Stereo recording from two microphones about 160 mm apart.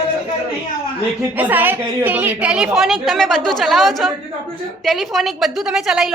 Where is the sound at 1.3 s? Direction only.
10° right (ahead or behind).